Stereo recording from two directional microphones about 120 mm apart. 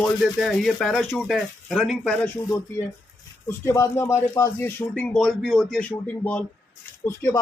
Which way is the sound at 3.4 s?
25° left (ahead or behind).